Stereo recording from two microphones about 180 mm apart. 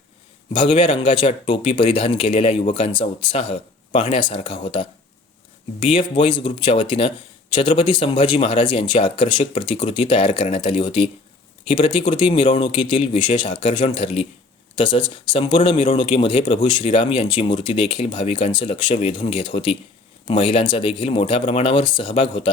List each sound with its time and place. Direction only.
0.5 s speech: 25° left (ahead or behind)